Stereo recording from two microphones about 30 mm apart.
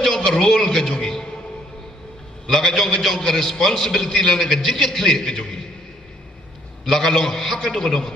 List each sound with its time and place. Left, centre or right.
0.0 s a sound: left
0.4 s a man's voice: centre
2.5 s a man's voice: centre
6.8 s a man's voice: centre